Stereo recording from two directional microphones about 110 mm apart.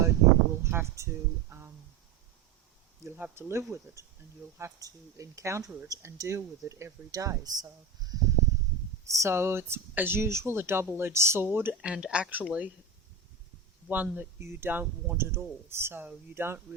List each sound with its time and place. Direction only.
0.6 s speech: 25° right (ahead or behind)
3.2 s a woman's voice: 20° right (ahead or behind)
13.8 s speech: 15° right (ahead or behind)